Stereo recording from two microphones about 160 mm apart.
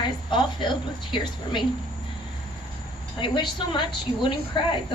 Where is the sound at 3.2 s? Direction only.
30° left (ahead or behind).